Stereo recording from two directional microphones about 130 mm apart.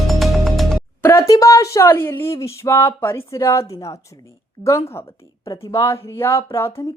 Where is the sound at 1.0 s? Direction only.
20° left (ahead or behind).